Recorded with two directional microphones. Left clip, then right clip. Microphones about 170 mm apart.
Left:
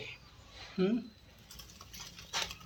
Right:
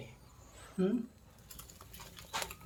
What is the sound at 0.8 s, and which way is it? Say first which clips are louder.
Speech: left 2 dB; 25° left (ahead or behind).